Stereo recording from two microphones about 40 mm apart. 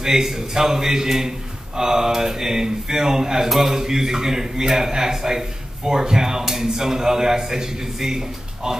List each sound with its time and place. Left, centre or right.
0.0 s a man's voice: centre